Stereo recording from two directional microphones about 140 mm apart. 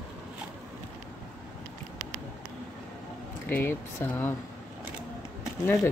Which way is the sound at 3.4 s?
15° left (ahead or behind).